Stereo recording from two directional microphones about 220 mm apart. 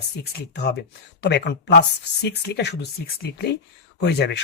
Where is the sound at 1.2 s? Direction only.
50° left (ahead or behind).